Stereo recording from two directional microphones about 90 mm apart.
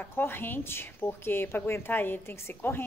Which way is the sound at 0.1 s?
25° left (ahead or behind).